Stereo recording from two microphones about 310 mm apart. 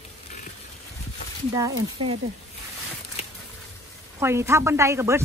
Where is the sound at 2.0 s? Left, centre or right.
Centre.